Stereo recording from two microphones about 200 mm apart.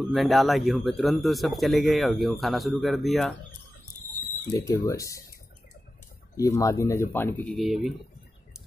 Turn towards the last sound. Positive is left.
turn(degrees=0)  # may be behind; listen again after turning